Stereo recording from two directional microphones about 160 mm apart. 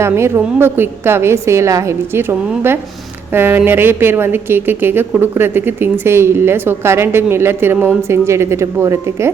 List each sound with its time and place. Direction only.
0.0 s a woman's voice: 15° right (ahead or behind)